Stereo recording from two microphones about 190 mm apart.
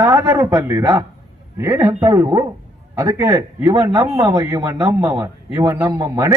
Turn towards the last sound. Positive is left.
turn(degrees=-15)  # may be behind; listen again after turning